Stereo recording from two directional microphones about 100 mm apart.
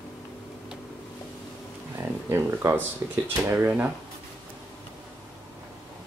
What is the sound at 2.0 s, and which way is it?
Speech, 25° right (ahead or behind).